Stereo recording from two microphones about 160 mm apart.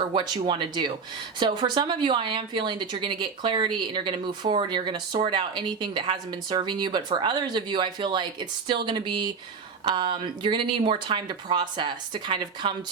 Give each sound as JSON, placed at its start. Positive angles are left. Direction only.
{"t": 0.1, "sound": "speech", "side_deg": -30}